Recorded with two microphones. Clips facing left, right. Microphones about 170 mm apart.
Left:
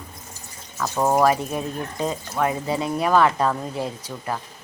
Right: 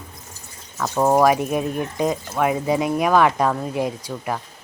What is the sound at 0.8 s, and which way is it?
Speech, 5° right (ahead or behind).